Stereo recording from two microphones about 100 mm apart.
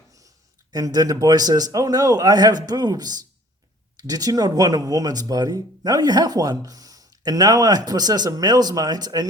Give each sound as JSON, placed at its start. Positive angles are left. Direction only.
{"t": 0.7, "sound": "speech", "side_deg": -40}